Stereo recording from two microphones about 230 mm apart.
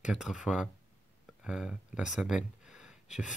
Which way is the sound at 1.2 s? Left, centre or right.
Centre.